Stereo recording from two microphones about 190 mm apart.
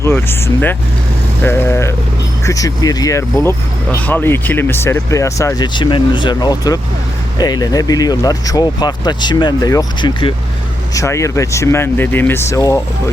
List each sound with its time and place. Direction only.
0.0 s speech: 10° left (ahead or behind)
10.9 s speech: 15° left (ahead or behind)